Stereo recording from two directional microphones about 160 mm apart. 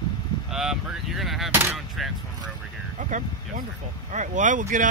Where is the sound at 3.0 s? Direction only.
50° right (ahead or behind).